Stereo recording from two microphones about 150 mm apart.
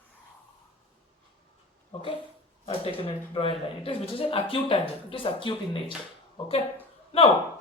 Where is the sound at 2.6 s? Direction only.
40° left (ahead or behind).